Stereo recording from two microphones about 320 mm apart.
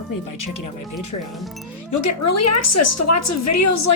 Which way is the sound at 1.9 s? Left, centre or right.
Left.